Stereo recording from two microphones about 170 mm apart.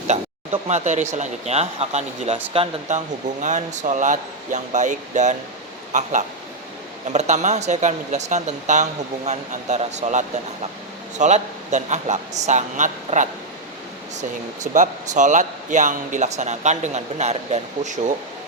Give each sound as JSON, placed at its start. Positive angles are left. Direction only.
{"t": 0.1, "sound": "speech", "side_deg": -40}